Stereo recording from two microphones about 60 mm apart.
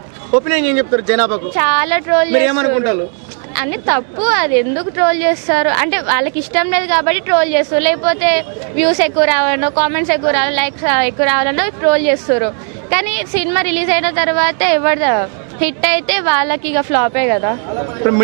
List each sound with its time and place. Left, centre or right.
0.3 s a woman's voice: centre